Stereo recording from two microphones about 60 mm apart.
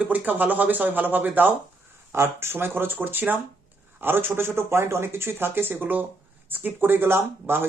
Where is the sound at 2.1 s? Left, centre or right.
Right.